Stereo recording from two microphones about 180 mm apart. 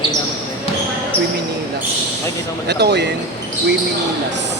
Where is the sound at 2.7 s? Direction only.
70° right (ahead or behind).